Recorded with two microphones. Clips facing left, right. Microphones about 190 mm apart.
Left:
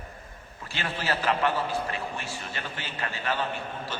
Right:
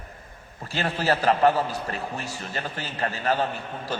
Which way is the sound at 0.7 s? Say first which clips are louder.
Right 6 dB; 40° right (ahead or behind).